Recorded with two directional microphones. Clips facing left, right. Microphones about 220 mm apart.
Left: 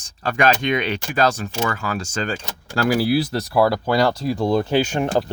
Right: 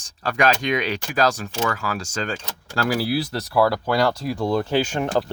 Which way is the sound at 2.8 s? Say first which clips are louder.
Left 4 dB; 15° left (ahead or behind).